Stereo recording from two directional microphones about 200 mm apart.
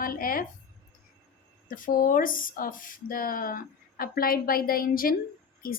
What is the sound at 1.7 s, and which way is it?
Speech, 45° left (ahead or behind).